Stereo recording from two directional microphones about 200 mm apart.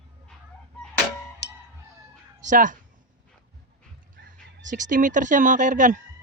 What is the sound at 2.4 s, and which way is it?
Speech, 40° right (ahead or behind).